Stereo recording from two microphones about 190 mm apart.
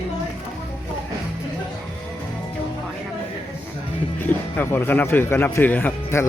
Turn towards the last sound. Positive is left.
turn(degrees=10)  # may be behind; listen again after turning